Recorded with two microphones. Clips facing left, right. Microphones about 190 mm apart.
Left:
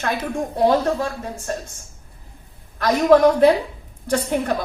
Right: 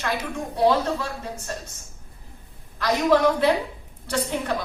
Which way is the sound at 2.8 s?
50° left (ahead or behind).